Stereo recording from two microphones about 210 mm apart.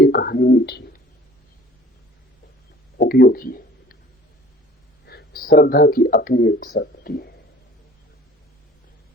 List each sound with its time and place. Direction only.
0.0 s whispering: 45° left (ahead or behind)
3.0 s a sound: 45° left (ahead or behind)
5.0 s speech: 45° left (ahead or behind)